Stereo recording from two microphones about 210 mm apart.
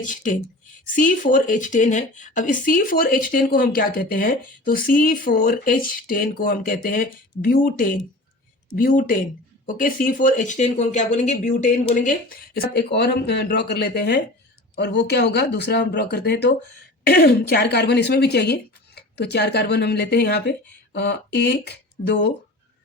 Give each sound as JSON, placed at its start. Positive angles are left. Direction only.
{"t": 0.0, "sound": "speech", "side_deg": 40}